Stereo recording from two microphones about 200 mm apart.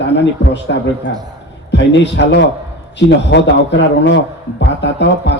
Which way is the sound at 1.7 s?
60° left (ahead or behind).